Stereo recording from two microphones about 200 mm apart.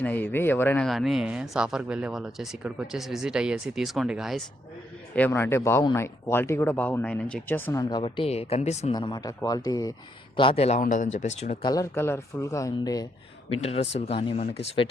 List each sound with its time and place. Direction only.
0.0 s speech: 10° left (ahead or behind)
5.1 s speech: 10° left (ahead or behind); by 8.9 s 35° left (ahead or behind)
8.9 s speech: 20° left (ahead or behind)
11.6 s speech: 20° left (ahead or behind)
13.5 s speech: 30° left (ahead or behind)